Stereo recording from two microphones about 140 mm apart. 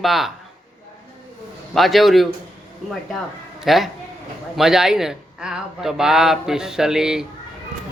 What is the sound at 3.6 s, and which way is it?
A man's voice, centre (ahead or behind).